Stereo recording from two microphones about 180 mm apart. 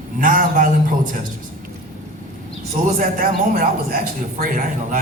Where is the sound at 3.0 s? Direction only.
50° right (ahead or behind).